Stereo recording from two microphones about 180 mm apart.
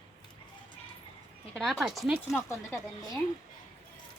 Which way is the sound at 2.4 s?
15° left (ahead or behind).